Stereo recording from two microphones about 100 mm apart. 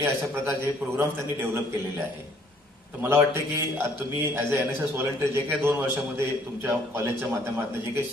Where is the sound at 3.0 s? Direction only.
25° right (ahead or behind).